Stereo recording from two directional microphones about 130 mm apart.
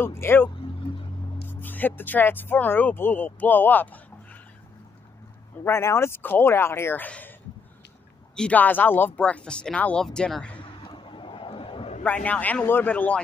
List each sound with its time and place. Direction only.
0.0 s speech: 20° left (ahead or behind)
1.5 s speech: 15° left (ahead or behind)
5.6 s speech: 20° left (ahead or behind)
8.4 s speech: 10° left (ahead or behind)
10.8 s vehicle: 40° left (ahead or behind)
12.3 s speech: 10° left (ahead or behind)